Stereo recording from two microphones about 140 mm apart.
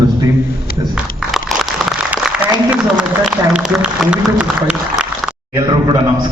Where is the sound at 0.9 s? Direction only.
5° right (ahead or behind).